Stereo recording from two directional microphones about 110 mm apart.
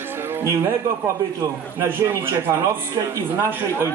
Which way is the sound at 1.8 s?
25° right (ahead or behind).